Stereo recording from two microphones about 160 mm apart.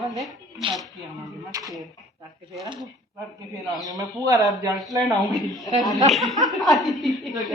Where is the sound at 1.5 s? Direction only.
20° right (ahead or behind).